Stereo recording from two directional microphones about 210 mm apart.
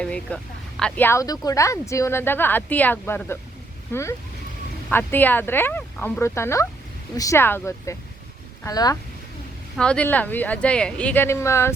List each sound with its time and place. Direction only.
0.0 s speech: 5° left (ahead or behind)
9.7 s speech: 5° left (ahead or behind)